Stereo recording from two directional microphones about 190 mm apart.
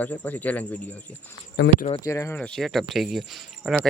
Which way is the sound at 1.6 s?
65° left (ahead or behind).